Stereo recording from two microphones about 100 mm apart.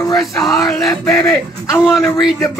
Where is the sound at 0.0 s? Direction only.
35° left (ahead or behind).